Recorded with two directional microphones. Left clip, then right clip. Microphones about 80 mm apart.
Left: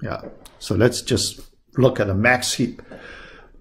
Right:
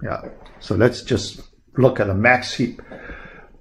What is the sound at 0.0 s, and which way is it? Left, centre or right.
Speech, left.